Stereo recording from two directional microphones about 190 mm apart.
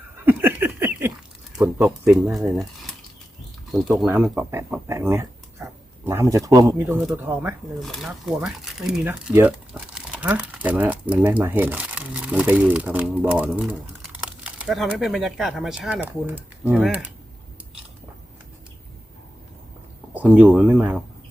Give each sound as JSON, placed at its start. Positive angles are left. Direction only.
{"t": 0.3, "sound": "a sound", "side_deg": -10}
{"t": 1.8, "sound": "speech", "side_deg": -5}
{"t": 20.1, "sound": "speech", "side_deg": -10}